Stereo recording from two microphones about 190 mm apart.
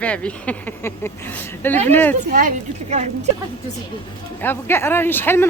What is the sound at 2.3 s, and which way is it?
Speech, 45° right (ahead or behind).